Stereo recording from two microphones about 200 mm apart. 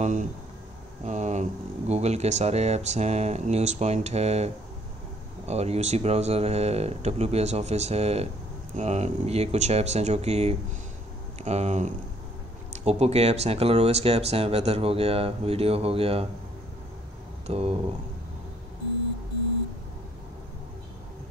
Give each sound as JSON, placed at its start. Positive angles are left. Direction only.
{"t": 0.0, "sound": "speech", "side_deg": -40}
{"t": 5.5, "sound": "speech", "side_deg": -30}
{"t": 17.5, "sound": "speech", "side_deg": -30}